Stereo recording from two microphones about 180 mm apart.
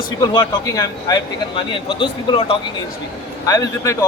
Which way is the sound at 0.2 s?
20° left (ahead or behind).